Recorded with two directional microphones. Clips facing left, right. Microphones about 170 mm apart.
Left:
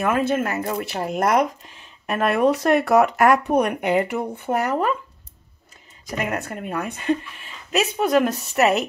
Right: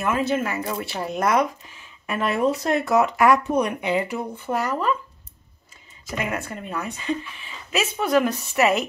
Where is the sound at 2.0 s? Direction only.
55° left (ahead or behind).